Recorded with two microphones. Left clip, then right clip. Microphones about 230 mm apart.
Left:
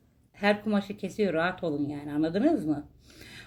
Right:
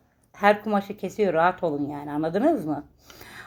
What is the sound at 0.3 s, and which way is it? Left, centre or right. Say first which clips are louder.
A woman's voice: right 6 dB; centre.